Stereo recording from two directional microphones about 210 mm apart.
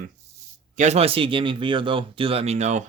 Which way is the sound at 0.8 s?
30° right (ahead or behind).